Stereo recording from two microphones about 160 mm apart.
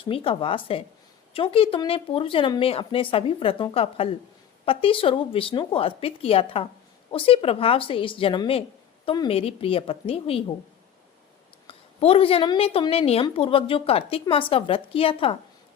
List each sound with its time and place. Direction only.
0.0 s a woman's voice: 35° left (ahead or behind)
11.7 s a woman's voice: 35° left (ahead or behind)